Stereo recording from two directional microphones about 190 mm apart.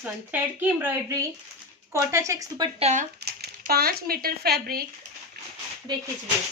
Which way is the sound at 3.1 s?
55° right (ahead or behind).